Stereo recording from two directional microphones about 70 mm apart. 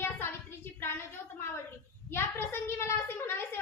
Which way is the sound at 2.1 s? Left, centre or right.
Left.